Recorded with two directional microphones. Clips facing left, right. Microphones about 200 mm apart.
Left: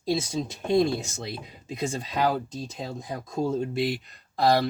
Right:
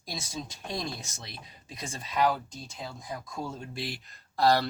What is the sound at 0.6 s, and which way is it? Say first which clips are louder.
Speech: left 16 dB; 25° left (ahead or behind).